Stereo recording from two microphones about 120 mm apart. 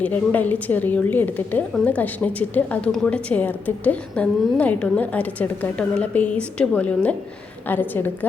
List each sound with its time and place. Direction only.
0.0 s a woman's voice: 15° left (ahead or behind)